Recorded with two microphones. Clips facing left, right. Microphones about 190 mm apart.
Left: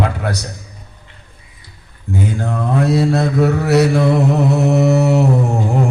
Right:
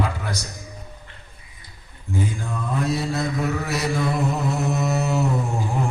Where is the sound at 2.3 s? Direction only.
70° left (ahead or behind).